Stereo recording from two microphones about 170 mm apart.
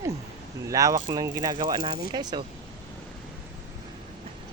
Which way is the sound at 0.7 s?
20° right (ahead or behind).